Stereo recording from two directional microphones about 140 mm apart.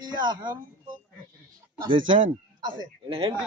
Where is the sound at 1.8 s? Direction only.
35° right (ahead or behind).